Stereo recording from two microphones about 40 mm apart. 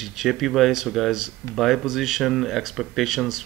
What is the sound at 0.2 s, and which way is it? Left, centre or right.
Speech, centre.